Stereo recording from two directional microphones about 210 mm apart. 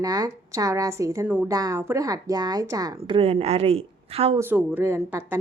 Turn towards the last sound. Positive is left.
turn(degrees=-10)  # may be behind; listen again after turning